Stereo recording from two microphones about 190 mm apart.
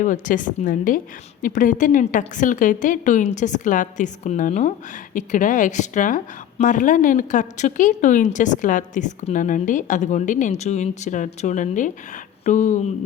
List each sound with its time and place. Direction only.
0.0 s a woman's voice: 45° left (ahead or behind)